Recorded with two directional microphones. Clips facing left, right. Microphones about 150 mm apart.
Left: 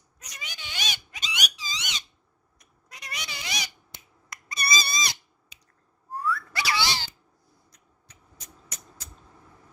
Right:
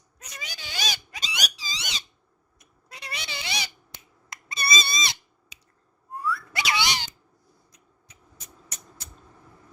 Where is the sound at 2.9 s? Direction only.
30° right (ahead or behind).